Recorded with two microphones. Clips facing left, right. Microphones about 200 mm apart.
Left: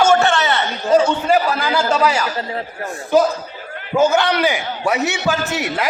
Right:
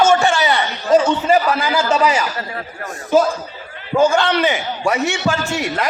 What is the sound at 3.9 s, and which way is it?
A man's voice, 5° left (ahead or behind).